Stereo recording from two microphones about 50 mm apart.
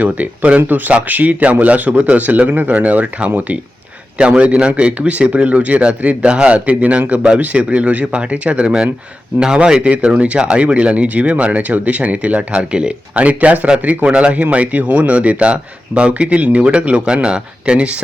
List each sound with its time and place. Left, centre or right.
0.0 s speech: right